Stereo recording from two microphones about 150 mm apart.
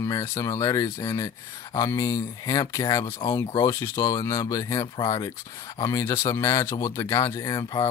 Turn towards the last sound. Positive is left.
turn(degrees=20)  # may be behind; listen again after turning